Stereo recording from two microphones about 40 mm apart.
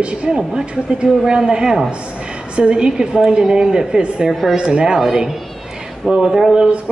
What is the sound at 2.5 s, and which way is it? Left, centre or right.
A woman's voice, right.